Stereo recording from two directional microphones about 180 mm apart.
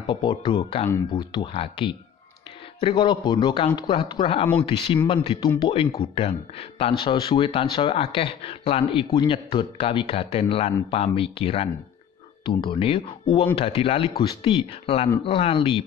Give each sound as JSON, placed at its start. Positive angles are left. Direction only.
{"t": 0.0, "sound": "speech", "side_deg": 25}